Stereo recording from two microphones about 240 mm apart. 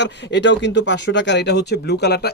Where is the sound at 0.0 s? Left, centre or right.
Left.